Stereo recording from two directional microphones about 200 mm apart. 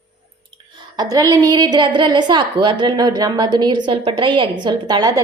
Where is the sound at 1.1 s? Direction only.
20° right (ahead or behind).